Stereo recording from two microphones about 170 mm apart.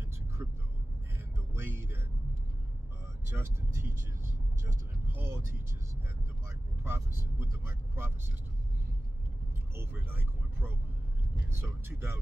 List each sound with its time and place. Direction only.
0.4 s vehicle: 15° right (ahead or behind)
1.5 s music: 15° right (ahead or behind)
3.3 s speech: 15° right (ahead or behind)
5.1 s vehicle: 15° right (ahead or behind)
6.8 s speech: 15° right (ahead or behind)
9.8 s speech: 10° right (ahead or behind)